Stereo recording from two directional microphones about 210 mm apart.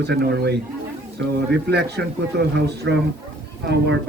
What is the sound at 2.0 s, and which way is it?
A man's voice, 50° right (ahead or behind).